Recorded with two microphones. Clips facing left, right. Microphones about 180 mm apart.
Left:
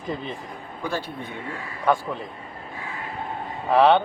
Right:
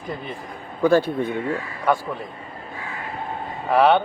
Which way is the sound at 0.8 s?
50° right (ahead or behind).